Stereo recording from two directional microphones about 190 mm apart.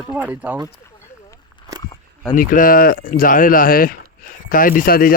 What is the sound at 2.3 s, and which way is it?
Speech, 45° left (ahead or behind).